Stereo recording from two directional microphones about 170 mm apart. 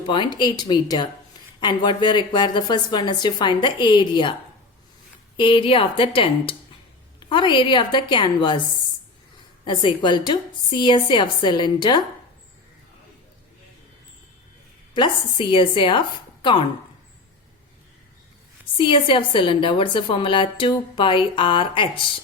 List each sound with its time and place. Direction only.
0.1 s a woman's voice: 25° left (ahead or behind)
5.4 s a woman's voice: 30° left (ahead or behind)
9.6 s a woman's voice: 30° left (ahead or behind)
14.9 s a woman's voice: 30° left (ahead or behind)
18.8 s a woman's voice: 30° left (ahead or behind)